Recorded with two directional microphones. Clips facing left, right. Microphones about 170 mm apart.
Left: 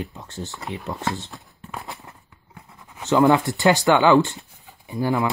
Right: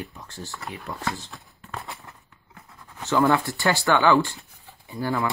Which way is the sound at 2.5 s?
15° left (ahead or behind).